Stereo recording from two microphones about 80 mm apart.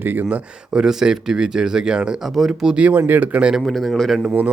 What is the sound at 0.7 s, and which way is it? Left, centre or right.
Speech, centre.